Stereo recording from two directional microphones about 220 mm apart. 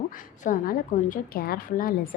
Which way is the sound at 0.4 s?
40° left (ahead or behind).